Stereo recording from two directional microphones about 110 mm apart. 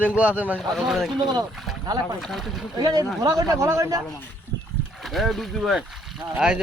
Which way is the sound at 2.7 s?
40° right (ahead or behind).